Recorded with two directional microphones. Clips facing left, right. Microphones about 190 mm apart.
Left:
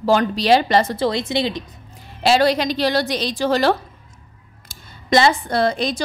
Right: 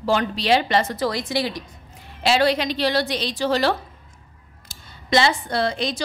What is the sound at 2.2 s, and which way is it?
Speech, 40° left (ahead or behind).